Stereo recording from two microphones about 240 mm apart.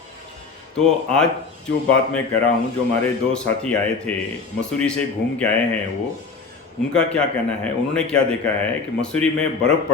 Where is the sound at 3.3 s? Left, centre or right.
Centre.